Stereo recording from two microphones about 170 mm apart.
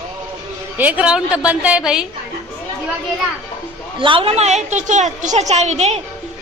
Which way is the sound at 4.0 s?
30° right (ahead or behind).